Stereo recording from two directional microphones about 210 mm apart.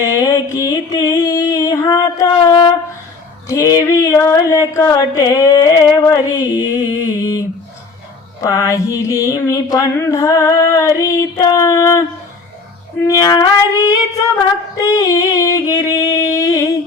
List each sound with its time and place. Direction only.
0.2 s music: 15° left (ahead or behind)
3.5 s carnatic music: 15° left (ahead or behind)
13.1 s carnatic music: 15° left (ahead or behind)